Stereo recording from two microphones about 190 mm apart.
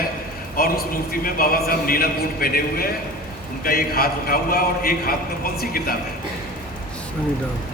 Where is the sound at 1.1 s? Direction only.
50° left (ahead or behind).